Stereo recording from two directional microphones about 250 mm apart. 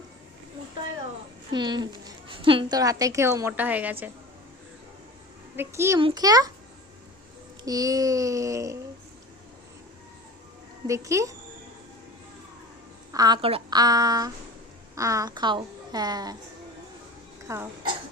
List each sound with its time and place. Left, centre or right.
1.5 s a woman's voice: centre
5.5 s a woman's voice: centre
7.6 s a woman's voice: centre
10.8 s a woman's voice: centre
13.1 s a woman's voice: centre
17.5 s a woman's voice: centre